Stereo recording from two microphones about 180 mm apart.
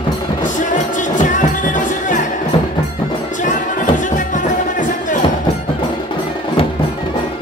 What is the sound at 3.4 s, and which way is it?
Music, 45° left (ahead or behind).